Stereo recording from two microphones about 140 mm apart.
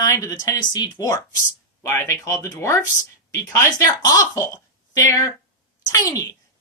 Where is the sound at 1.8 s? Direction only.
20° left (ahead or behind).